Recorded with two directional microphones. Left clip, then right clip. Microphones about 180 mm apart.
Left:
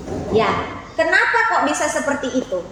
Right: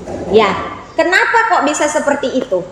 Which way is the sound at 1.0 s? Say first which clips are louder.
Right 4 dB; 30° right (ahead or behind).